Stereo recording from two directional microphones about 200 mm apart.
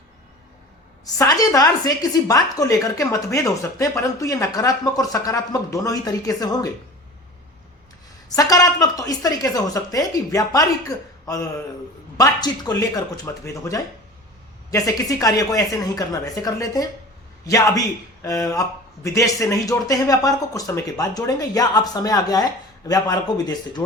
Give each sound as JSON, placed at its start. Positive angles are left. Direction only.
{"t": 1.2, "sound": "a woman's voice", "side_deg": 20}
{"t": 8.4, "sound": "a woman's voice", "side_deg": 15}
{"t": 12.1, "sound": "a woman's voice", "side_deg": 20}